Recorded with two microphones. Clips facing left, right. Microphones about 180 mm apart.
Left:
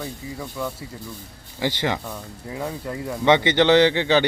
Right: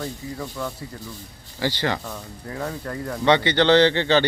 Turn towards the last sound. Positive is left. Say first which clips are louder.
# even
turn(degrees=10)  # may be behind; listen again after turning